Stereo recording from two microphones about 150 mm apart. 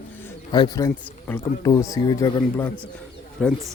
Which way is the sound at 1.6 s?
20° left (ahead or behind).